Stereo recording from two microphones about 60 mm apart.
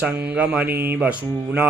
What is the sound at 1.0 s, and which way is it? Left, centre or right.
Mantra, right.